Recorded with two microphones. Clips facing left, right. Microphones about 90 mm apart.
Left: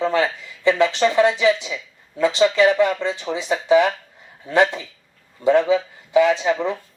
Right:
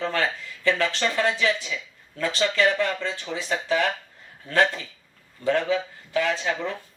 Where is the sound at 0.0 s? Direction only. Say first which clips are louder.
Left 6 dB; 15° left (ahead or behind).